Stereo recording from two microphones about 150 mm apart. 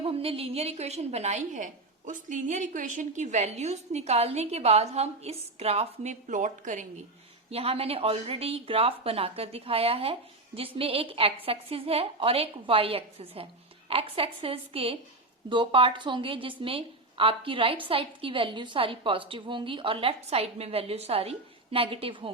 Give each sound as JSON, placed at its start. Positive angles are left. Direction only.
{"t": 0.0, "sound": "a woman's voice", "side_deg": -40}
{"t": 7.5, "sound": "a woman's voice", "side_deg": -40}